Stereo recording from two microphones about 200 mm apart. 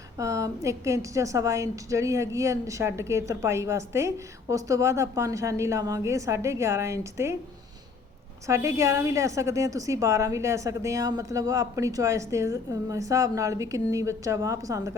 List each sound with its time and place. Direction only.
0.2 s a woman's voice: 15° right (ahead or behind)
8.4 s a woman's voice: 15° right (ahead or behind)